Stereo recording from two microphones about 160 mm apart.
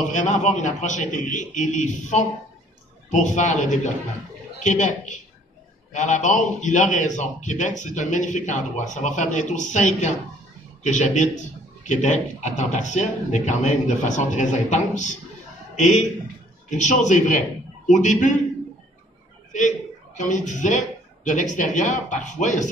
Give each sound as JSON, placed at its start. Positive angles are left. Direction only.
{"t": 0.1, "sound": "a man's voice", "side_deg": 50}
{"t": 20.2, "sound": "a man's voice", "side_deg": 50}